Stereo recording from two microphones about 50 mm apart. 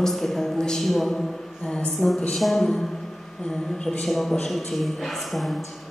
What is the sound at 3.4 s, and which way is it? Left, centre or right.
Speech, centre.